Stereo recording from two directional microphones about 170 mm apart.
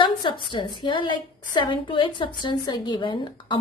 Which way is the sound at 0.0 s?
25° left (ahead or behind).